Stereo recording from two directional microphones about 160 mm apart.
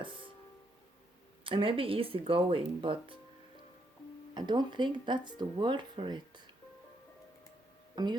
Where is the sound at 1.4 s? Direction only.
35° right (ahead or behind).